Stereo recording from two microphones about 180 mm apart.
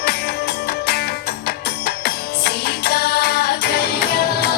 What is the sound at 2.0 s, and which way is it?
Music, 60° left (ahead or behind).